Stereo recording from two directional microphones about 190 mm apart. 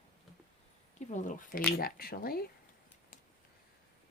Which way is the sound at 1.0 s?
40° left (ahead or behind).